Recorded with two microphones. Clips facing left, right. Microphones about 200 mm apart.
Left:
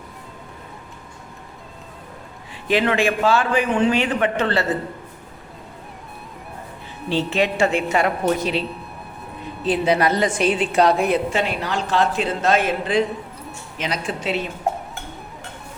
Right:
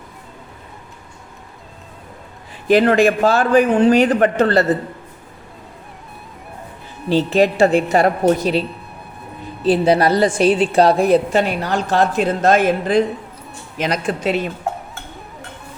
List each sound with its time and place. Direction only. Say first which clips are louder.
2.6 s a woman's voice: right 6 dB; 40° right (ahead or behind)
7.1 s a woman's voice: right 6 dB; 40° right (ahead or behind)
9.6 s a woman's voice: right 5 dB; 35° right (ahead or behind)